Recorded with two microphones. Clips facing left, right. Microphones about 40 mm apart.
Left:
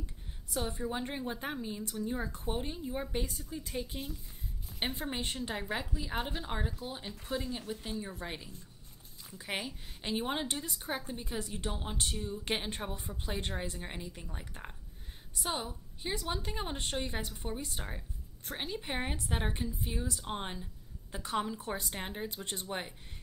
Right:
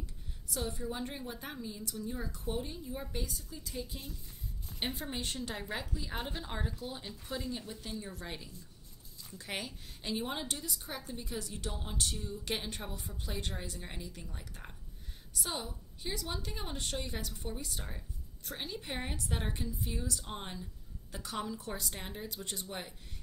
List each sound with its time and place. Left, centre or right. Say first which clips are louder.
0.6 s a woman's voice: left 2 dB; left
4.7 s a woman's voice: left 2 dB; centre
7.4 s a woman's voice: left 2 dB; left
7.8 s a woman's voice: left 3 dB; left
10.0 s a woman's voice: left 3 dB; left